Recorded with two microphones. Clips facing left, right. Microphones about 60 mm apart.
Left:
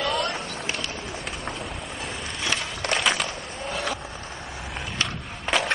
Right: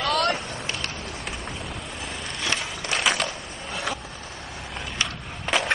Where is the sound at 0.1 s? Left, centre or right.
Right.